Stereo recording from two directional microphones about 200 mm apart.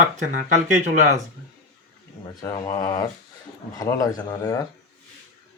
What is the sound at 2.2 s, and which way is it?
Speech, 20° left (ahead or behind).